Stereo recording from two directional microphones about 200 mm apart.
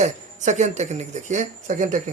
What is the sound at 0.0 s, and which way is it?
Speech, 35° right (ahead or behind).